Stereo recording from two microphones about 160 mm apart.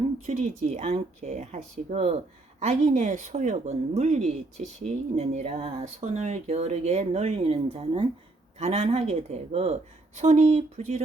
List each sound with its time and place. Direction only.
0.3 s speech: 45° right (ahead or behind)
2.6 s speech: 50° right (ahead or behind)